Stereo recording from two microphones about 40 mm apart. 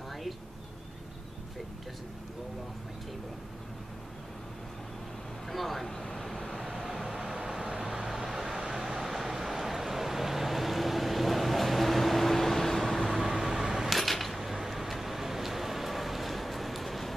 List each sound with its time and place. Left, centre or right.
5.5 s vehicle: centre
13.2 s vehicle: centre
13.9 s a sound: centre